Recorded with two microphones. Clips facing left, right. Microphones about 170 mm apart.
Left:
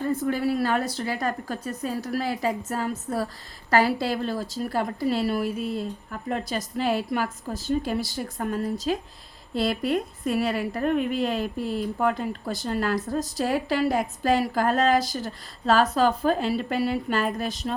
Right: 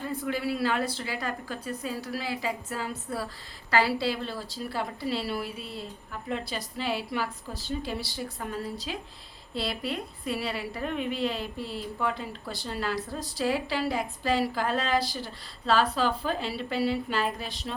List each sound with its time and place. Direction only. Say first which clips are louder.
0.0 s a woman's voice: left 6 dB; 45° left (ahead or behind)